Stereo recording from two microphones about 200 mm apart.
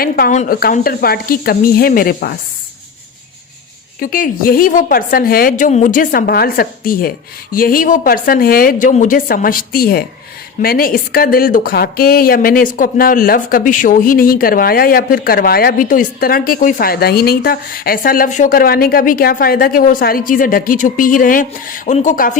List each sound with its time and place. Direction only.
0.0 s speech: 45° left (ahead or behind)
4.0 s speech: 45° left (ahead or behind)